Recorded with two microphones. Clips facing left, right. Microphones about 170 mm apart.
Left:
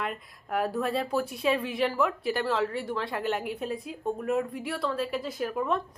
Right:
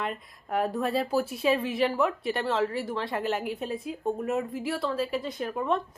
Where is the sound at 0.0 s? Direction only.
Centre (ahead or behind).